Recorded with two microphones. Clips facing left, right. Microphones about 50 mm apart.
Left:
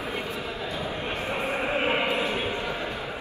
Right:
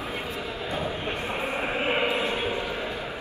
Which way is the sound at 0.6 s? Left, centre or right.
Right.